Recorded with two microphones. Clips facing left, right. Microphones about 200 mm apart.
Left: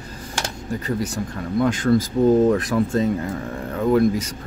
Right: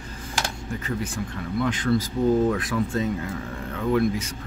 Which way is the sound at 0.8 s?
40° left (ahead or behind).